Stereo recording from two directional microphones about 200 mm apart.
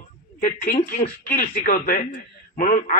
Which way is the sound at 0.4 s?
40° left (ahead or behind).